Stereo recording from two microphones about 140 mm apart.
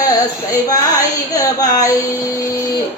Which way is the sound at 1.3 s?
25° left (ahead or behind).